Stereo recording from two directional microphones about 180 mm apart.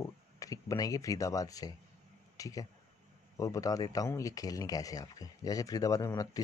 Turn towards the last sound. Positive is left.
turn(degrees=20)  # may be behind; listen again after turning